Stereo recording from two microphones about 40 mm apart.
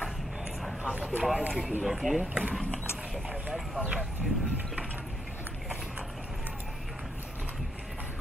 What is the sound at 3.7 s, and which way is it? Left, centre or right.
Speech, right.